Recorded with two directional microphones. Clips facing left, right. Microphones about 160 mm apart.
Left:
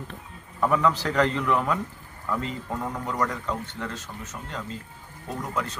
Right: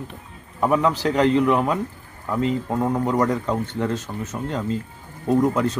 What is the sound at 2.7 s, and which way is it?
A man's voice, 30° right (ahead or behind).